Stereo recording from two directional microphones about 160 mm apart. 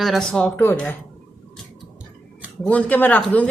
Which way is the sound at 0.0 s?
Centre (ahead or behind).